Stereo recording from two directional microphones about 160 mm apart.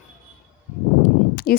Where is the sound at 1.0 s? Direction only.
65° left (ahead or behind).